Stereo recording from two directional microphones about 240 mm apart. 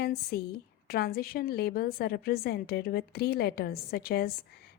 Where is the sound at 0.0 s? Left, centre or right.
Left.